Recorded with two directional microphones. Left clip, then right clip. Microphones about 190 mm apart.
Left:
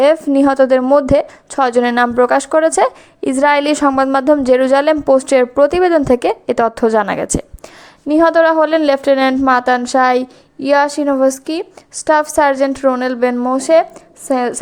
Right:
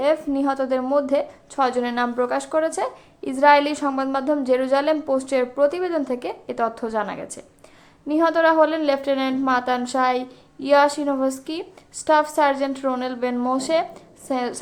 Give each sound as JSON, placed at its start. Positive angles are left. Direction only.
{"t": 0.0, "sound": "a woman's voice", "side_deg": 45}